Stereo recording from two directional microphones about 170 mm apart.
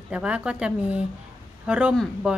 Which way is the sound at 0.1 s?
5° right (ahead or behind).